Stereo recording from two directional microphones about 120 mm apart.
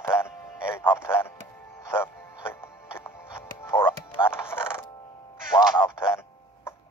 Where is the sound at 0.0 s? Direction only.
20° left (ahead or behind).